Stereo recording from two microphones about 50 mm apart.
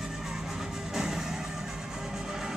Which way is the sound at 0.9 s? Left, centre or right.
Centre.